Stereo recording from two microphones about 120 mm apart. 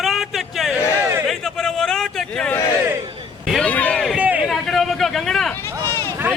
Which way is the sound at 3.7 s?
10° left (ahead or behind).